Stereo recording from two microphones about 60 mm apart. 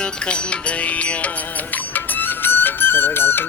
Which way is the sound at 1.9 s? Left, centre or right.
Left.